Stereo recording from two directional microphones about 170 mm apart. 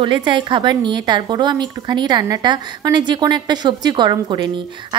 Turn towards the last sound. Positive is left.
turn(degrees=-25)  # may be behind; listen again after turning